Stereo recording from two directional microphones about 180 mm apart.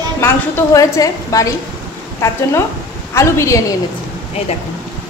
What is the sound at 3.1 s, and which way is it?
Speech, 15° left (ahead or behind).